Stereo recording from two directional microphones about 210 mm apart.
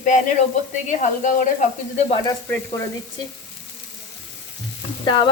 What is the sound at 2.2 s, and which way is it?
Sizzle, 15° left (ahead or behind).